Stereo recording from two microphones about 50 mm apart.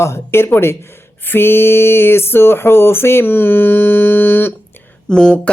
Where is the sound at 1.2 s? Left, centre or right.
Left.